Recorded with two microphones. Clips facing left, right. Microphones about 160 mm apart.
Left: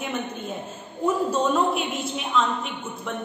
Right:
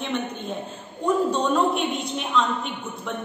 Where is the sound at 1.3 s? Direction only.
5° left (ahead or behind).